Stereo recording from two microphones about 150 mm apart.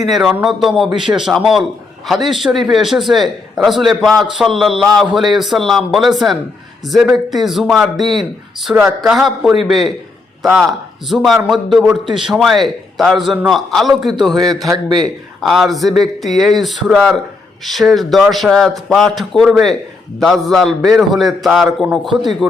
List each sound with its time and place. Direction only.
0.1 s a man's voice: centre (ahead or behind)
14.7 s speech: 25° right (ahead or behind)
15.0 s a man's voice: centre (ahead or behind)